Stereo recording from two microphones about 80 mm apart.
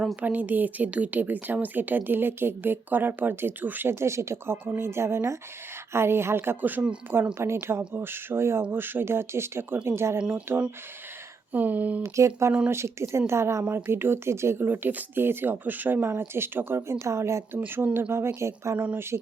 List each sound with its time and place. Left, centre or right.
0.2 s a woman's voice: right
7.3 s a woman's voice: right
10.2 s speech: centre
11.5 s a woman's voice: right
12.0 s a woman's voice: right
17.6 s a woman's voice: right
19.1 s speech: right